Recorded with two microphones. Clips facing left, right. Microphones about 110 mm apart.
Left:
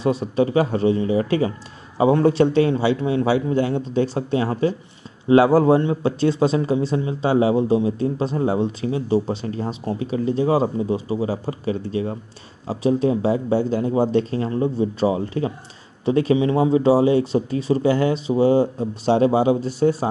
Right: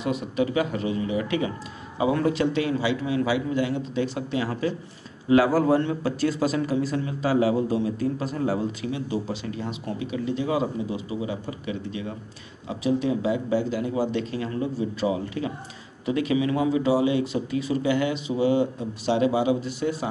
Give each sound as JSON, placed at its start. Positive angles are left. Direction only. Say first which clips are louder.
{"t": 0.0, "sound": "speech", "louder": "left 6 dB", "side_deg": 30}